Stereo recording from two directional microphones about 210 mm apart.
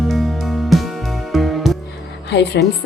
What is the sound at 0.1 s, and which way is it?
Music, centre (ahead or behind).